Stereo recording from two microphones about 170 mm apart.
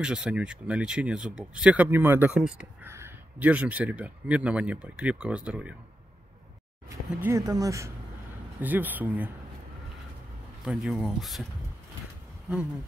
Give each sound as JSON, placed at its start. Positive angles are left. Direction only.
{"t": 0.0, "sound": "speech", "side_deg": -5}
{"t": 7.1, "sound": "speech", "side_deg": -10}
{"t": 10.6, "sound": "speech", "side_deg": -5}